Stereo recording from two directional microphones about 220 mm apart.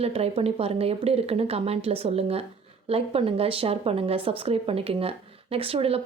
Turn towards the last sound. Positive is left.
turn(degrees=-25)  # may be behind; listen again after turning